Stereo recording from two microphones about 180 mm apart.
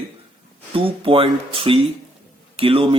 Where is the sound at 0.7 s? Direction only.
30° right (ahead or behind).